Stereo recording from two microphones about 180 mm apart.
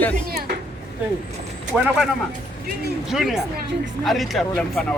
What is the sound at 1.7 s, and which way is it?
Speech, centre (ahead or behind).